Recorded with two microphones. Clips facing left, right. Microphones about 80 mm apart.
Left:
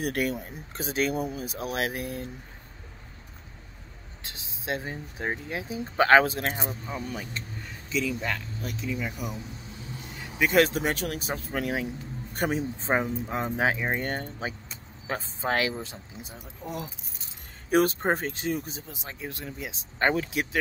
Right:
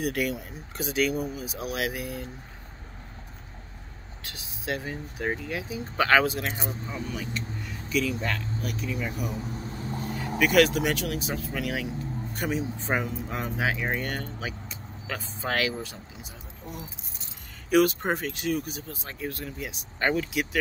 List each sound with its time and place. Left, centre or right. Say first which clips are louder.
0.0 s speech: even; left
4.2 s speech: right 1 dB; left
7.9 s speech: right 1 dB; left
9.4 s vehicle: right 7 dB; right
10.4 s speech: right 1 dB; left
12.8 s speech: left 2 dB; left
16.6 s speech: left 5 dB; left
17.6 s speech: right 1 dB; left